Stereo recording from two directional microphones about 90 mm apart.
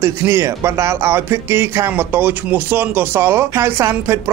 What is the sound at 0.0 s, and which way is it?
Speech, 30° right (ahead or behind).